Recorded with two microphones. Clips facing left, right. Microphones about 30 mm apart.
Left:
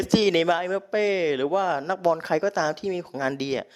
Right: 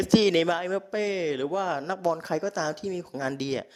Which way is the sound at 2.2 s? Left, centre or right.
Left.